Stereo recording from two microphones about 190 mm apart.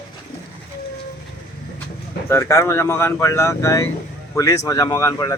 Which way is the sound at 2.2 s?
15° left (ahead or behind).